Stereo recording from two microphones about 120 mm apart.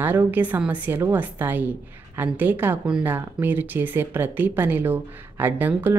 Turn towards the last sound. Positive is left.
turn(degrees=-15)  # may be behind; listen again after turning